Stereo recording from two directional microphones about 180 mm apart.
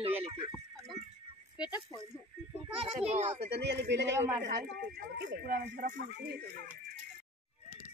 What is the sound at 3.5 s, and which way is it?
Speech, 70° right (ahead or behind).